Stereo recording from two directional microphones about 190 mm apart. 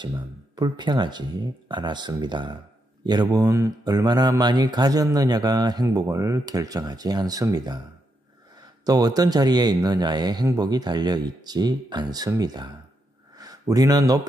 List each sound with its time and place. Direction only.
0.6 s speech: 25° right (ahead or behind)
8.8 s speech: 20° right (ahead or behind)